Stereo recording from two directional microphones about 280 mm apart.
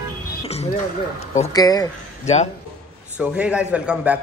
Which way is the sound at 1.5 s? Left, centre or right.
Centre.